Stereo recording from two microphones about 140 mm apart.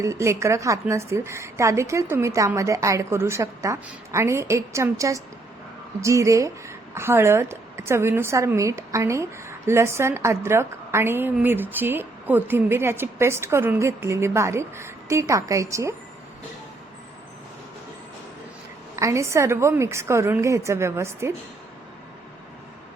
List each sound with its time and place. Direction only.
0.0 s a woman's voice: 20° right (ahead or behind)
18.9 s a woman's voice: 20° right (ahead or behind)